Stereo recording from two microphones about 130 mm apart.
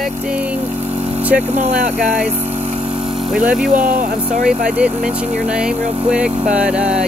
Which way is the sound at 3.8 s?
90° right.